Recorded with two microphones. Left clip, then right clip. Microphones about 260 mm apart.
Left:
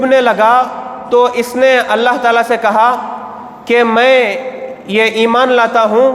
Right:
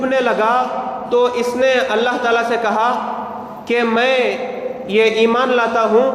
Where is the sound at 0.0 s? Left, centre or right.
Left.